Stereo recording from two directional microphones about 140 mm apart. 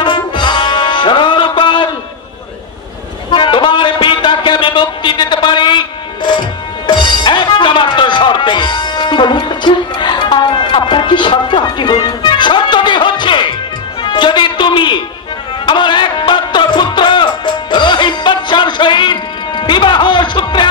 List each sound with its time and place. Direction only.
0.0 s music: 35° left (ahead or behind)
3.3 s a sound: 35° left (ahead or behind)
6.9 s a man's voice: 35° left (ahead or behind)
15.6 s music: 35° left (ahead or behind)